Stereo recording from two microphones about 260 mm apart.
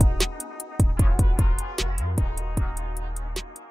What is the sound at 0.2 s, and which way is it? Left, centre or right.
Music, centre.